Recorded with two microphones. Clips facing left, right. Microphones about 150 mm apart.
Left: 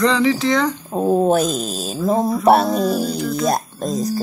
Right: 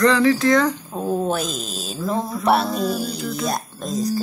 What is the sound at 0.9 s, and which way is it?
Speech, 35° left (ahead or behind).